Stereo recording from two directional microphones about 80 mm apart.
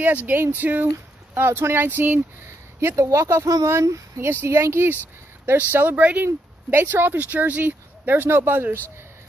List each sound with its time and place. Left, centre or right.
0.0 s speech: right
5.7 s speech: right